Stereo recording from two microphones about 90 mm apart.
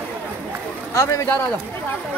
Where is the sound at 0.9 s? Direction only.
30° left (ahead or behind).